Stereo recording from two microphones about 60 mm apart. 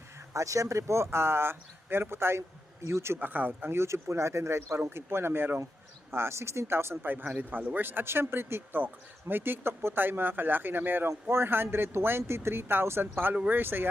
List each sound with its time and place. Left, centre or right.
0.3 s speech: right
3.2 s speech: right
3.8 s speech: right